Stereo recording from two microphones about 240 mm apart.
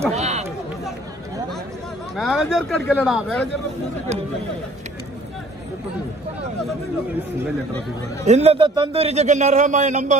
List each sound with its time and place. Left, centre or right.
0.1 s a man's voice: right
2.1 s speech: centre
8.3 s a man's voice: right